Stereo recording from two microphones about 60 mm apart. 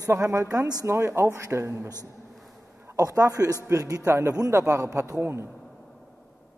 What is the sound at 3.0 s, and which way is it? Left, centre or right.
A man's voice, right.